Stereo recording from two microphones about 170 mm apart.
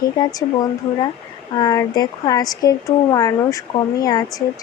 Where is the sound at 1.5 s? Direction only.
25° left (ahead or behind).